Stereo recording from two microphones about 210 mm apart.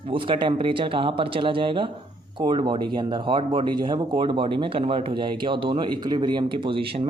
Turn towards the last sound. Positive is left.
turn(degrees=-25)  # may be behind; listen again after turning